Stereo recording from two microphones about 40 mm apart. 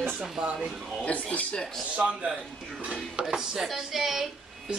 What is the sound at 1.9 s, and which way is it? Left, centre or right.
Speech, right.